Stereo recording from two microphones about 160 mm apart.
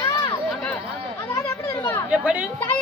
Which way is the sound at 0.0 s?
20° left (ahead or behind).